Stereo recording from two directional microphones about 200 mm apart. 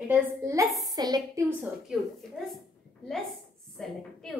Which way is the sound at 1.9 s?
5° right (ahead or behind).